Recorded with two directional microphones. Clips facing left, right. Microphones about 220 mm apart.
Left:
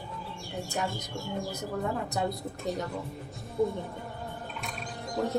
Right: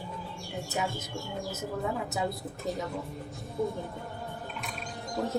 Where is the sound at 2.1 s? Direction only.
Centre (ahead or behind).